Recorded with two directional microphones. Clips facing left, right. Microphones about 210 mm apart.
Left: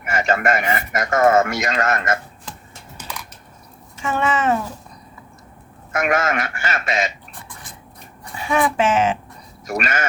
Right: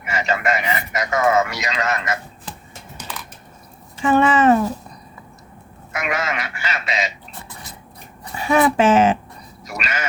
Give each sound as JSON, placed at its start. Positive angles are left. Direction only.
{"t": 0.0, "sound": "a man's voice", "side_deg": 50}
{"t": 3.9, "sound": "speech", "side_deg": -35}
{"t": 5.9, "sound": "a man's voice", "side_deg": 50}
{"t": 8.4, "sound": "speech", "side_deg": -40}
{"t": 9.6, "sound": "a man's voice", "side_deg": 50}